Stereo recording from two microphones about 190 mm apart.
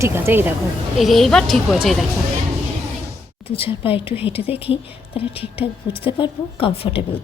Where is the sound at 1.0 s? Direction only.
Centre (ahead or behind).